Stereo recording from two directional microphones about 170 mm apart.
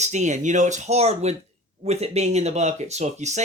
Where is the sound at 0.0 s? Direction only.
45° right (ahead or behind).